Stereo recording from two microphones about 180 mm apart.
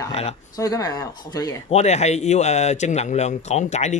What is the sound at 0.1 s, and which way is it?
Speech, 35° left (ahead or behind).